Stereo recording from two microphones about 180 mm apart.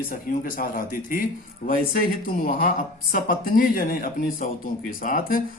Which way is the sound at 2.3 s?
50° left (ahead or behind).